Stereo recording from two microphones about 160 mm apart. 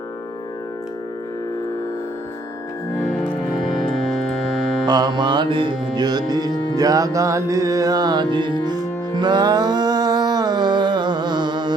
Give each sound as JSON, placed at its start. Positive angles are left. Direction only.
{"t": 4.9, "sound": "music", "side_deg": -25}